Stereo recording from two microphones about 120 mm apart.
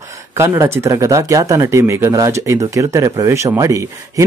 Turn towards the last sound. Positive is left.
turn(degrees=-25)  # may be behind; listen again after turning